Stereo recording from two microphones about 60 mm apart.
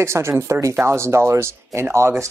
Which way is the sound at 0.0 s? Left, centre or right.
Right.